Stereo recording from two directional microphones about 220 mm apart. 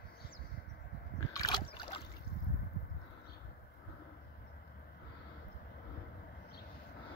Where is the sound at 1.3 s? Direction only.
20° left (ahead or behind).